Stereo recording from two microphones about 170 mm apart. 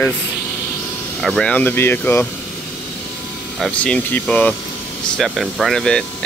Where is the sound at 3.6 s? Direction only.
5° left (ahead or behind).